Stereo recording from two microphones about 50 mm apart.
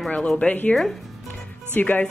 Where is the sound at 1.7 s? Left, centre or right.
Left.